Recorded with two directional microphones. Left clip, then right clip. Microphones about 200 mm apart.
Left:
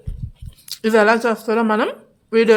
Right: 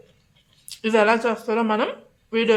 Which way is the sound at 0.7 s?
35° left (ahead or behind).